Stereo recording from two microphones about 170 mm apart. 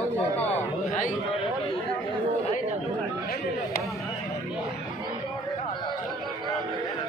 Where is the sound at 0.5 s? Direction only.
45° left (ahead or behind).